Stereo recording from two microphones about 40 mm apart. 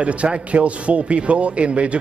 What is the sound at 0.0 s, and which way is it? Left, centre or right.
A man's voice, right.